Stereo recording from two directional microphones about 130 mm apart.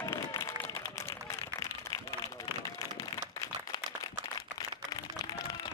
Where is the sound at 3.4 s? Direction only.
30° left (ahead or behind).